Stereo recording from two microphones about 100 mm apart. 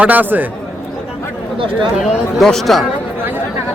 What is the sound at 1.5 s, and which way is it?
Speech, 60° right (ahead or behind).